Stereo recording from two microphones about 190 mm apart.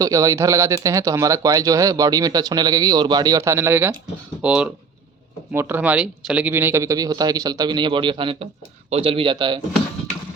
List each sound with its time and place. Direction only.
0.0 s speech: 15° right (ahead or behind)